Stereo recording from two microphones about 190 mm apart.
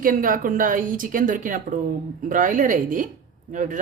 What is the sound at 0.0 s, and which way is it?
Speech, 45° right (ahead or behind).